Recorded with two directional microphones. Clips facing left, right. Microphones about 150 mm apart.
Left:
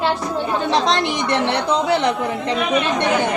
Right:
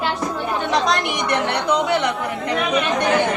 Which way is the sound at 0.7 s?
30° left (ahead or behind).